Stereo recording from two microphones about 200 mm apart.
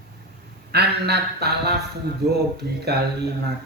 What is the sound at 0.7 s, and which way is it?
Speech, 55° right (ahead or behind).